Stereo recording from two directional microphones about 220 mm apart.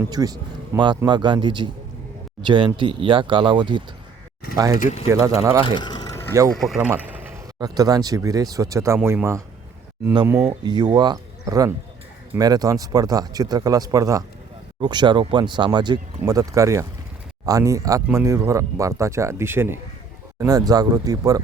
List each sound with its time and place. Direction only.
0.0 s speech: 15° right (ahead or behind)
5.6 s a sound: 20° left (ahead or behind)
6.5 s speech: centre (ahead or behind); by 21.4 s 15° right (ahead or behind)